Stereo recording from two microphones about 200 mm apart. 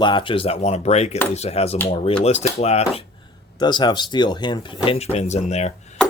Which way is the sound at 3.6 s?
20° left (ahead or behind).